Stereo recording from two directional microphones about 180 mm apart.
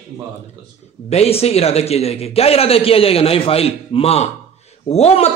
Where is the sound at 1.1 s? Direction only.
35° left (ahead or behind).